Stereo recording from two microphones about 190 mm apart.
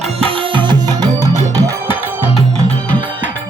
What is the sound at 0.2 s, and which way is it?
Music, 30° right (ahead or behind).